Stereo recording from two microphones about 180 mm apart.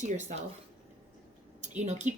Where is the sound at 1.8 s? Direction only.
40° right (ahead or behind).